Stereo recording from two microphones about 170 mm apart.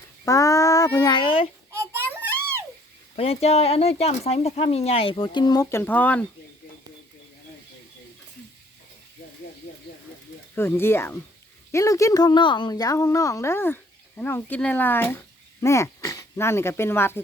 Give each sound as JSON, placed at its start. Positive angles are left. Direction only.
{"t": 0.3, "sound": "a sound", "side_deg": 20}
{"t": 1.7, "sound": "children playing", "side_deg": -15}
{"t": 3.2, "sound": "speech", "side_deg": 35}
{"t": 10.5, "sound": "a woman's voice", "side_deg": 15}